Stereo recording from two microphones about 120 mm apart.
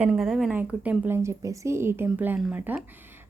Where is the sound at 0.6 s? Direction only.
15° right (ahead or behind).